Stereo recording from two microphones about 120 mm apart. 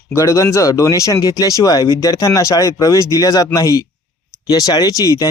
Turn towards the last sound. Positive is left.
turn(degrees=30)  # may be behind; listen again after turning